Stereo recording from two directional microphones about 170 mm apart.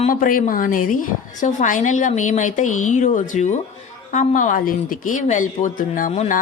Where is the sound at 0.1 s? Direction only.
55° left (ahead or behind).